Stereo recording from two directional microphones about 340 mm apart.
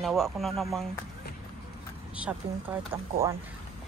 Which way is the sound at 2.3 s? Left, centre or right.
Centre.